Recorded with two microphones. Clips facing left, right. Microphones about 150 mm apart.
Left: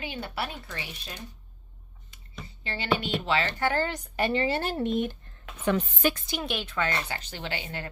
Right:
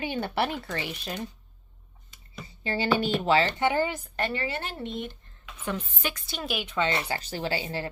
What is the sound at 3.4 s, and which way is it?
Speech, 15° right (ahead or behind).